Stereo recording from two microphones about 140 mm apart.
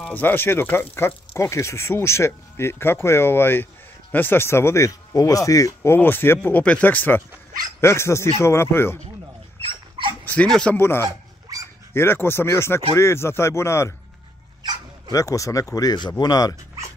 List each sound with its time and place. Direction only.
0.0 s speech: 15° left (ahead or behind)
9.6 s dog: 40° right (ahead or behind)
10.2 s speech: 10° left (ahead or behind)
11.1 s dog: 25° right (ahead or behind)
11.9 s speech: 15° left (ahead or behind)
15.0 s speech: 25° left (ahead or behind)